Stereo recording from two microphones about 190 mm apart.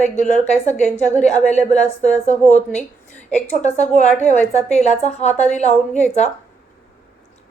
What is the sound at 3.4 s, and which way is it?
A woman's voice, 35° left (ahead or behind).